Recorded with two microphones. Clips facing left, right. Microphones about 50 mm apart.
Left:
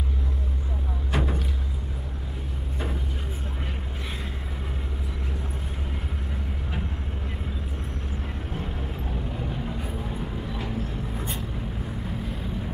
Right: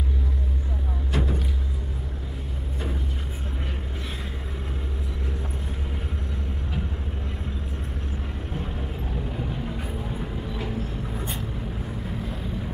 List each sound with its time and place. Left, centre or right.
1.1 s vehicle: left
9.4 s vehicle: centre